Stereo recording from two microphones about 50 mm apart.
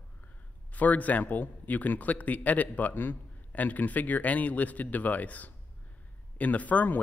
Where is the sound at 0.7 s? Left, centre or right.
Left.